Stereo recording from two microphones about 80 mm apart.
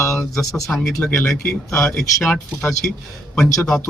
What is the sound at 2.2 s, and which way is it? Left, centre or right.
Speech, centre.